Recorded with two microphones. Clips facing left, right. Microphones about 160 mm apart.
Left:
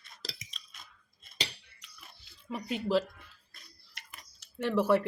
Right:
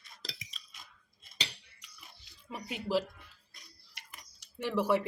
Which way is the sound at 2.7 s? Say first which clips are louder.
Left 3 dB; 10° right (ahead or behind).